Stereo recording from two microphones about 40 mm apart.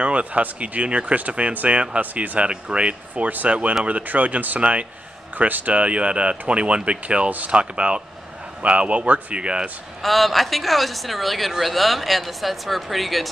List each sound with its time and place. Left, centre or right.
0.0 s speech: right
4.6 s speech: right
7.2 s speech: right
7.5 s speech: right
9.3 s speech: right
10.0 s speech: centre